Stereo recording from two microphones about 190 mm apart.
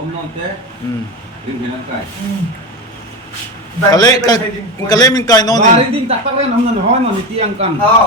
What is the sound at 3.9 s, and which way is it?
A man's voice, 20° left (ahead or behind).